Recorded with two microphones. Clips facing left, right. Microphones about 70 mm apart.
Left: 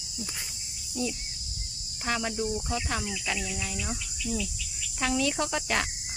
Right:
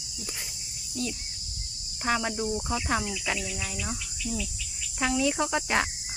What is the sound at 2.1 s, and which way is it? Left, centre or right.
Speech, centre.